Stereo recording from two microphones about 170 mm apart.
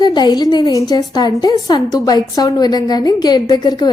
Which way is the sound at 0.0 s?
25° left (ahead or behind).